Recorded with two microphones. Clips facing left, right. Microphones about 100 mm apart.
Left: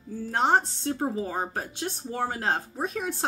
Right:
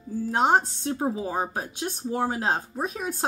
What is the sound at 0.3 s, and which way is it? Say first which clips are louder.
Speech: right 2 dB; 15° right (ahead or behind).